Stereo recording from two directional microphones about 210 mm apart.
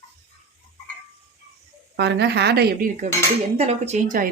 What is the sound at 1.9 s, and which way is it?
Speech, 55° right (ahead or behind).